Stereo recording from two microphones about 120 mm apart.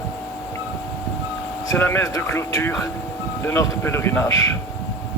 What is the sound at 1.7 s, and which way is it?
A man's voice, 20° left (ahead or behind).